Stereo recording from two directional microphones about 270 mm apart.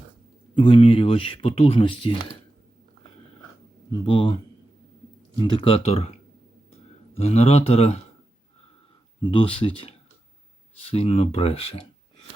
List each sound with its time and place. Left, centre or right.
0.5 s speech: centre
4.0 s a man's voice: centre
5.4 s speech: centre
7.2 s speech: left
9.2 s speech: centre